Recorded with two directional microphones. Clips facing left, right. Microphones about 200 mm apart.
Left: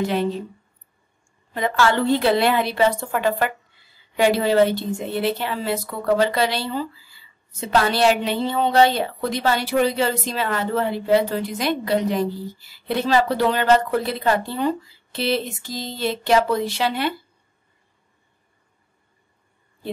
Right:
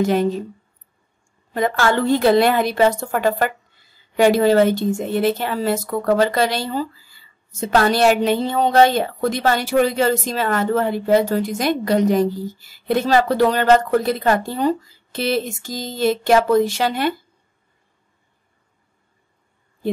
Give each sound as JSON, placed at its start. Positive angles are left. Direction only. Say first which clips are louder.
{"t": 0.0, "sound": "a woman's voice", "louder": "right 4 dB", "side_deg": -45}
{"t": 1.5, "sound": "a woman's voice", "louder": "right 2 dB", "side_deg": -45}